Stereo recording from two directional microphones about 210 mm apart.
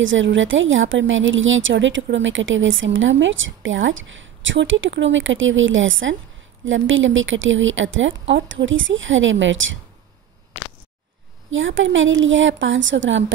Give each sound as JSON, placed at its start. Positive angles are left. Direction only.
{"t": 0.0, "sound": "a woman's voice", "side_deg": -65}
{"t": 11.5, "sound": "a woman's voice", "side_deg": -65}